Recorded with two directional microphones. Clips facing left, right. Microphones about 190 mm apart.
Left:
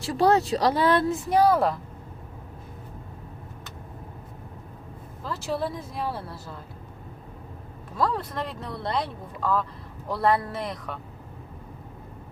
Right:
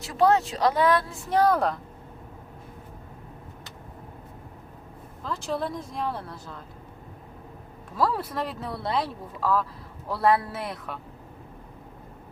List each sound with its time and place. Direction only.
0.0 s speech: 35° left (ahead or behind); by 1.8 s 5° left (ahead or behind)
5.2 s speech: 5° left (ahead or behind)
7.9 s speech: 5° right (ahead or behind)